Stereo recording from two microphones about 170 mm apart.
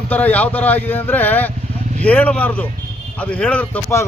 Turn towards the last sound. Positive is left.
turn(degrees=10)  # may be behind; listen again after turning